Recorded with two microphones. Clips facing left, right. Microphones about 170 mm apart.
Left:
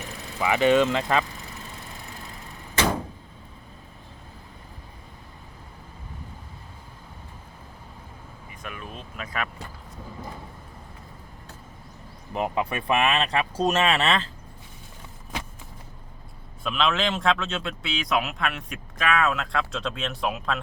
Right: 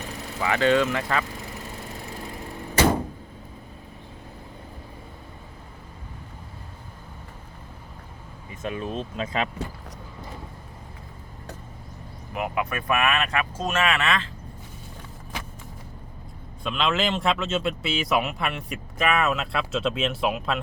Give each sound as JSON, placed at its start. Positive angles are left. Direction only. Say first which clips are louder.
{"t": 0.4, "sound": "speech", "louder": "left 1 dB", "side_deg": 15}
{"t": 8.4, "sound": "speech", "louder": "right 9 dB", "side_deg": -25}
{"t": 12.3, "sound": "speech", "louder": "left 1 dB", "side_deg": 30}
{"t": 16.6, "sound": "speech", "louder": "even", "side_deg": 0}